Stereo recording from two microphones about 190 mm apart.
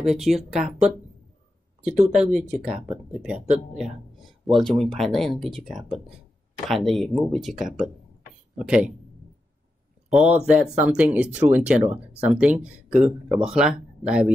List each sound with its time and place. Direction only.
0.0 s speech: centre (ahead or behind)
2.0 s speech: 5° right (ahead or behind)
10.0 s speech: 5° right (ahead or behind)